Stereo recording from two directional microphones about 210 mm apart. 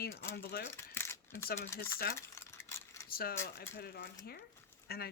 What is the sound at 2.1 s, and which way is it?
Cutlery, 15° left (ahead or behind).